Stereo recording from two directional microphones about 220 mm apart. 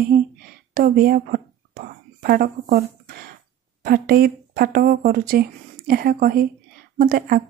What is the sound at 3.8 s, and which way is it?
A woman's voice, 45° right (ahead or behind).